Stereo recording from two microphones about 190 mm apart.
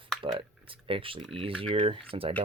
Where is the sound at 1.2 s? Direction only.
Centre (ahead or behind).